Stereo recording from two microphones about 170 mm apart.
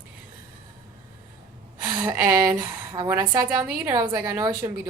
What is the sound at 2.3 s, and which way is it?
A woman's voice, 15° right (ahead or behind).